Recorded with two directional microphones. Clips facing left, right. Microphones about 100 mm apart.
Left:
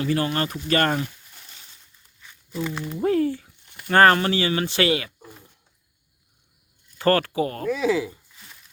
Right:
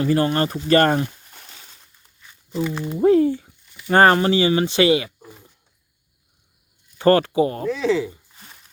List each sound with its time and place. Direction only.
0.0 s speech: 35° right (ahead or behind)
2.8 s speech: 20° right (ahead or behind)
7.0 s speech: 20° right (ahead or behind)
7.7 s speech: 5° left (ahead or behind)
8.3 s a sound: 40° right (ahead or behind)